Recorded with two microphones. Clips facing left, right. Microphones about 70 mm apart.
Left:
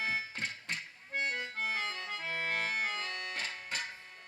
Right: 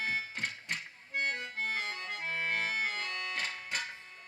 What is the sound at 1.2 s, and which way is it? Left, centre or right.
Accordion, right.